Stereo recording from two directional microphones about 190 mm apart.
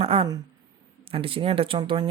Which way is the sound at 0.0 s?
30° right (ahead or behind).